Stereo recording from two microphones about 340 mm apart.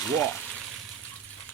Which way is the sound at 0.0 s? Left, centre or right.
Centre.